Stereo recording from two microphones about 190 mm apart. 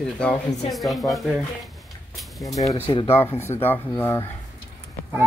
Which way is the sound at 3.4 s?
10° left (ahead or behind).